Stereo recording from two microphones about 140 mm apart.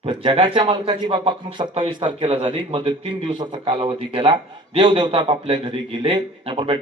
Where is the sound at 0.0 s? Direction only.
40° right (ahead or behind).